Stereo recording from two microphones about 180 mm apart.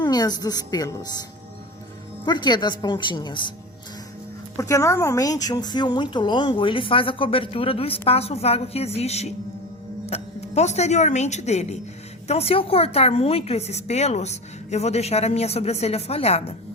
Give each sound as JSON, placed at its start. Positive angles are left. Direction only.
{"t": 0.0, "sound": "a woman's voice", "side_deg": 20}
{"t": 2.2, "sound": "speech", "side_deg": 25}
{"t": 4.5, "sound": "a woman's voice", "side_deg": 15}